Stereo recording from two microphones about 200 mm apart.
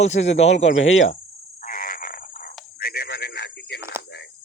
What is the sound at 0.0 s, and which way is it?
Speech, 35° left (ahead or behind).